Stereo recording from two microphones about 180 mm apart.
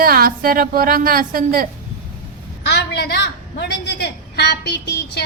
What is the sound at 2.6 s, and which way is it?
A woman's voice, 65° left (ahead or behind).